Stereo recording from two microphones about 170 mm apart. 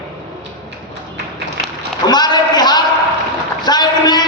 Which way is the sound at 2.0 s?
25° left (ahead or behind).